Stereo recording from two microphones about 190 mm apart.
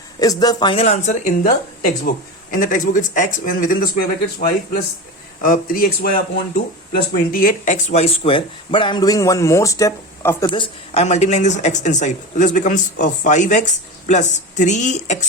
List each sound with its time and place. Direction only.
0.2 s a woman's voice: 20° left (ahead or behind); by 15.3 s 40° left (ahead or behind)